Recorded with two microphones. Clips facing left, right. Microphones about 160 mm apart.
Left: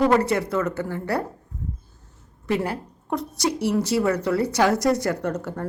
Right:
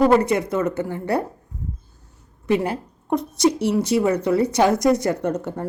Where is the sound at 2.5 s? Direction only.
20° right (ahead or behind).